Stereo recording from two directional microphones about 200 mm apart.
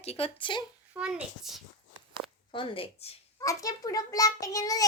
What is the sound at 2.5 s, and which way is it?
A woman's voice, 25° left (ahead or behind).